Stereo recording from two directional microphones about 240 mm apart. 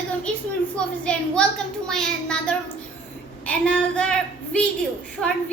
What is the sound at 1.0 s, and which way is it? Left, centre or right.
A child's voice, centre.